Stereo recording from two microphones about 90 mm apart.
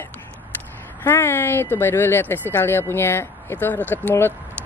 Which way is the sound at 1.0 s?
25° left (ahead or behind).